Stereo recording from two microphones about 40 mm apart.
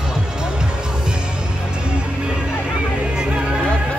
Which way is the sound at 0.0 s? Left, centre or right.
Centre.